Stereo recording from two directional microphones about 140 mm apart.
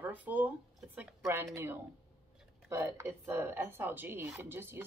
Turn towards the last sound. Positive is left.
turn(degrees=-15)  # may be behind; listen again after turning